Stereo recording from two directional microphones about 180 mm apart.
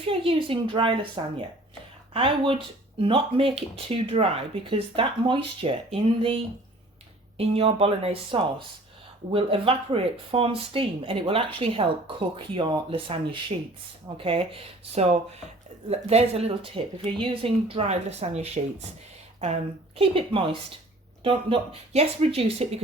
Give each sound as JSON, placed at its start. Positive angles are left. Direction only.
{"t": 0.1, "sound": "speech", "side_deg": -30}
{"t": 20.0, "sound": "speech", "side_deg": -30}